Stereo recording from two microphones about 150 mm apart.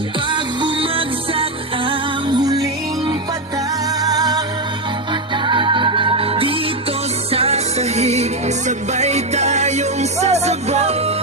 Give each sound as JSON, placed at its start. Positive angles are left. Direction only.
{"t": 0.3, "sound": "music", "side_deg": -30}
{"t": 4.0, "sound": "music", "side_deg": -25}